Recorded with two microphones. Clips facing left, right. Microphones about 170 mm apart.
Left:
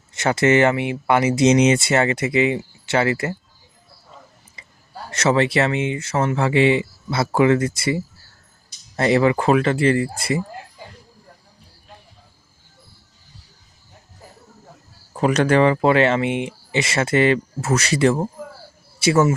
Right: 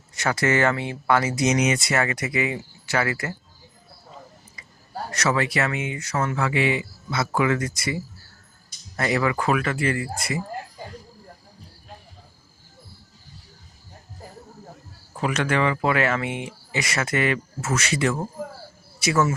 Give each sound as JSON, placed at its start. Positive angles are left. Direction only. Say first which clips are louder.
{"t": 0.1, "sound": "speech", "louder": "left 6 dB", "side_deg": 25}
{"t": 5.1, "sound": "speech", "louder": "left 6 dB", "side_deg": 25}
{"t": 9.0, "sound": "speech", "louder": "left 6 dB", "side_deg": 25}
{"t": 15.2, "sound": "speech", "louder": "left 7 dB", "side_deg": 35}